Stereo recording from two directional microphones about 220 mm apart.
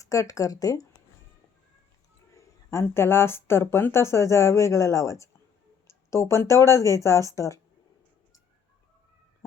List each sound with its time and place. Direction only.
0.0 s speech: 15° left (ahead or behind)
2.6 s speech: 10° left (ahead or behind)